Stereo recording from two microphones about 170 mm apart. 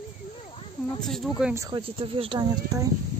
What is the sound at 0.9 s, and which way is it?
Speech, centre (ahead or behind).